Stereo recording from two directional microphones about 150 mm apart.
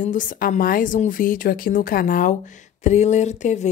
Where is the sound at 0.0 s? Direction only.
60° left (ahead or behind).